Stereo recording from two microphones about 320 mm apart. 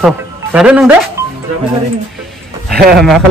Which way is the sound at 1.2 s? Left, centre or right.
Centre.